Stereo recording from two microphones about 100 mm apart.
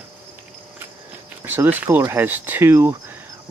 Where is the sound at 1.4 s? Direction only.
20° right (ahead or behind).